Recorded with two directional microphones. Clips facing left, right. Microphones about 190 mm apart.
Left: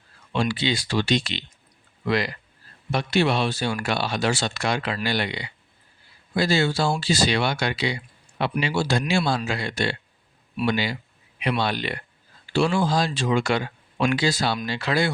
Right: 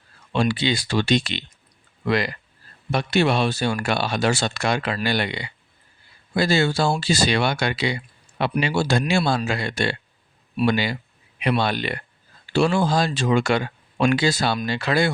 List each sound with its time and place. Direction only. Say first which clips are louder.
0.3 s speech: right 3 dB; 55° right (ahead or behind)